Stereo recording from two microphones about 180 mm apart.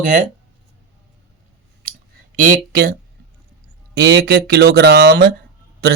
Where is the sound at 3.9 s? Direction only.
65° right (ahead or behind).